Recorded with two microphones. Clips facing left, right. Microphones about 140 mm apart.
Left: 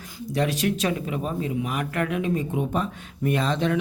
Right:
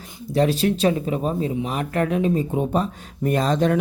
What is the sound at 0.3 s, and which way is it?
Speech, 30° right (ahead or behind).